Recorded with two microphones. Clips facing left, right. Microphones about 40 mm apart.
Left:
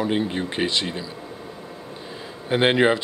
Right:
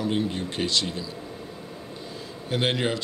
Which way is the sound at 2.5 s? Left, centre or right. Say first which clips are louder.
Left 7 dB; left.